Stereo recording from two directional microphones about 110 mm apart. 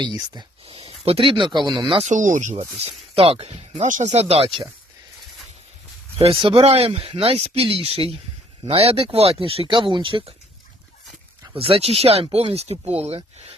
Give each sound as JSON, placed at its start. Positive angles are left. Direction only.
{"t": 0.7, "sound": "speech", "side_deg": -65}
{"t": 2.0, "sound": "speech", "side_deg": -90}
{"t": 3.2, "sound": "speech", "side_deg": -65}
{"t": 6.1, "sound": "speech", "side_deg": -55}
{"t": 11.5, "sound": "speech", "side_deg": -60}